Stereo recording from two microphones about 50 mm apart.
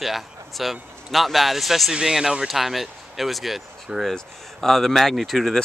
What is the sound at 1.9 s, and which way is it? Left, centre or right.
Speech, centre.